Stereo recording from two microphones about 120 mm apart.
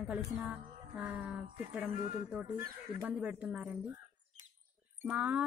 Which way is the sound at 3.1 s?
10° right (ahead or behind).